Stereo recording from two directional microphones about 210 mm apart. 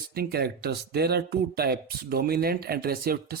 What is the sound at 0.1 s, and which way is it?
Speech, 45° right (ahead or behind).